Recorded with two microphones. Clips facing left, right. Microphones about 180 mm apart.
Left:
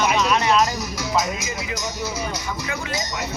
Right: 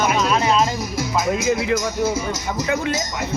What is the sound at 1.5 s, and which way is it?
Speech, 65° right (ahead or behind).